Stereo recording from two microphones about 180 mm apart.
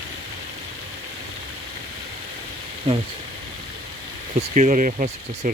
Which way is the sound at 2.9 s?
30° right (ahead or behind).